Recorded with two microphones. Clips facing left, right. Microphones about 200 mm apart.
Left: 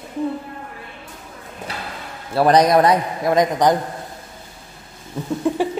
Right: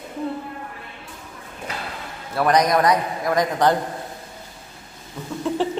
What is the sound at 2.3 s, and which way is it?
A man's voice, 30° left (ahead or behind).